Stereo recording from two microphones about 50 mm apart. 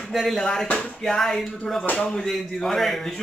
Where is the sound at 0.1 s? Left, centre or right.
Centre.